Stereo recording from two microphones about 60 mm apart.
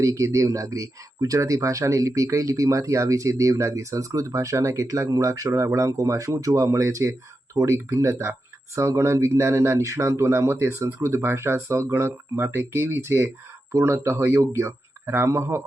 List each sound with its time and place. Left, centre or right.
0.0 s speech: right